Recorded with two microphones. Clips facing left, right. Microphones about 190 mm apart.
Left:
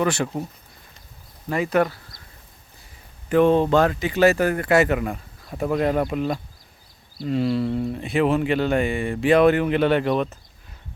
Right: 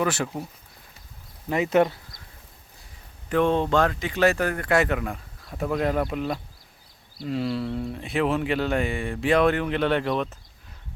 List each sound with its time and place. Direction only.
0.0 s speech: 5° right (ahead or behind)
1.5 s speech: 20° right (ahead or behind)
3.2 s speech: 5° left (ahead or behind)